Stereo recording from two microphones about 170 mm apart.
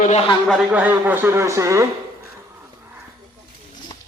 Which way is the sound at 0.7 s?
10° right (ahead or behind).